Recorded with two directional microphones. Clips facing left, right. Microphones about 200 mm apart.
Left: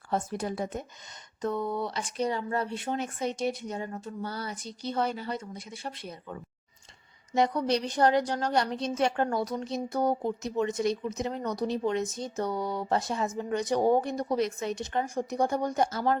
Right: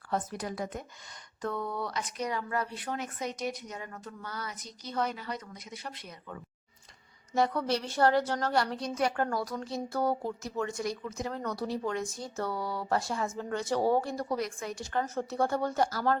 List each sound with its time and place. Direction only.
0.1 s a woman's voice: 25° left (ahead or behind)